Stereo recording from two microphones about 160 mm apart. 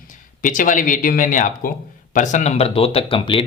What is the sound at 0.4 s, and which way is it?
Speech, 55° left (ahead or behind).